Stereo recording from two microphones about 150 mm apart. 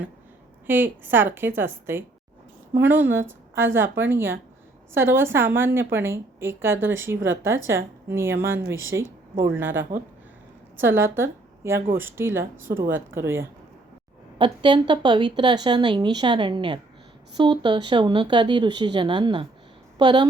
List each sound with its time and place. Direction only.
0.7 s a woman's voice: 15° right (ahead or behind)
14.3 s a woman's voice: 35° right (ahead or behind)